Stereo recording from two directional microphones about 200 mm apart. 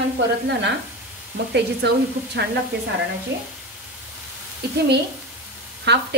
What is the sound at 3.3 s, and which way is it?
Speech, 65° right (ahead or behind).